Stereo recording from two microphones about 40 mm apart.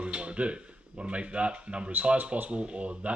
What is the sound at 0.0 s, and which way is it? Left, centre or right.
Speech, right.